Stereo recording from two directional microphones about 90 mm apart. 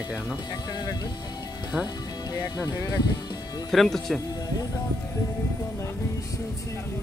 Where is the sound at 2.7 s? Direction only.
40° left (ahead or behind).